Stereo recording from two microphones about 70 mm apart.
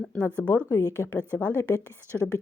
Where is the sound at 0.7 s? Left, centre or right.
Left.